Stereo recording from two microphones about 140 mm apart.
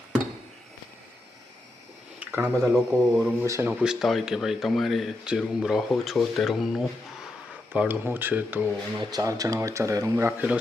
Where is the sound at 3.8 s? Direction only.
5° right (ahead or behind).